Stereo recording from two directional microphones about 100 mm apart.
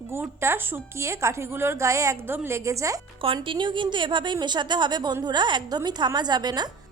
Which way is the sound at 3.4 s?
55° right (ahead or behind).